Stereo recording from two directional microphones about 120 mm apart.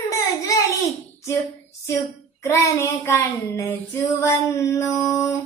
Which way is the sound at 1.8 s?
25° left (ahead or behind).